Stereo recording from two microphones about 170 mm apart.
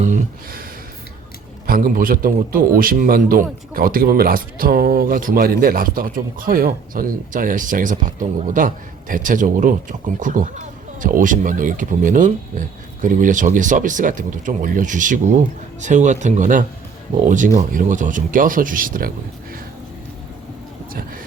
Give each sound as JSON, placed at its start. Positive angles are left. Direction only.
{"t": 0.0, "sound": "speech", "side_deg": -45}
{"t": 1.6, "sound": "a man's voice", "side_deg": -55}